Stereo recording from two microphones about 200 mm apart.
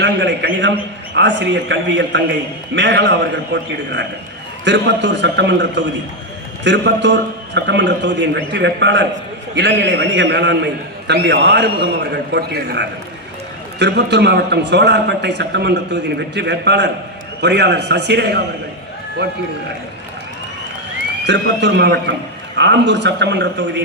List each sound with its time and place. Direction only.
0.0 s a man's voice: 60° right (ahead or behind)
21.2 s a man's voice: 60° right (ahead or behind)